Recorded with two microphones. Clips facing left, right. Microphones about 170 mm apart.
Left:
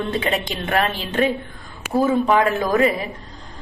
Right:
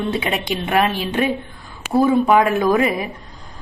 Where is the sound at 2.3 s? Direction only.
15° right (ahead or behind).